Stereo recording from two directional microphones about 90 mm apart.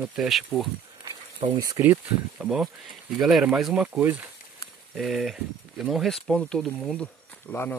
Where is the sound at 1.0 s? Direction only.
60° right (ahead or behind).